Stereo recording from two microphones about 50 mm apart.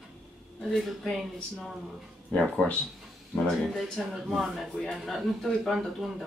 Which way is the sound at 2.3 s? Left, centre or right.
Left.